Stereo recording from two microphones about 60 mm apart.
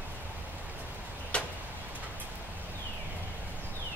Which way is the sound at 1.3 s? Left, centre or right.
Centre.